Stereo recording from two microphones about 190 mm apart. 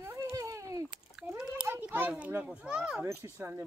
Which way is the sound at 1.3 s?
5° right (ahead or behind).